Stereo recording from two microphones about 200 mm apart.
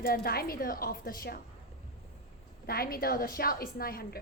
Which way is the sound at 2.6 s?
50° left (ahead or behind).